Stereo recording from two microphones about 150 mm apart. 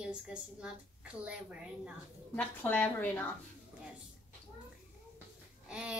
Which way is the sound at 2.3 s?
10° left (ahead or behind).